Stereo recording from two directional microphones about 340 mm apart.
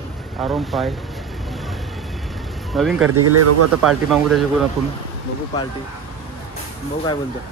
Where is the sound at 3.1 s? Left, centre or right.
Right.